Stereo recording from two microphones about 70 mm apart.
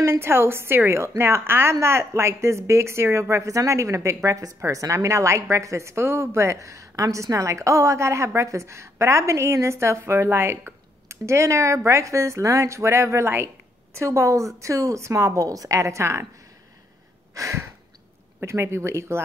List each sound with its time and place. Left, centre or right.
0.0 s a woman's voice: right
17.3 s a sound: right
18.4 s a woman's voice: right